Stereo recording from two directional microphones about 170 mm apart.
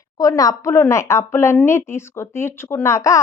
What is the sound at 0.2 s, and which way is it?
A woman's voice, 20° left (ahead or behind).